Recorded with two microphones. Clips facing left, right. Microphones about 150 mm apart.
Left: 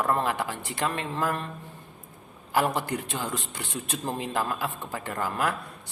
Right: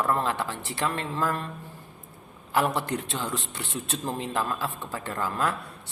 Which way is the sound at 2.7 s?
10° left (ahead or behind).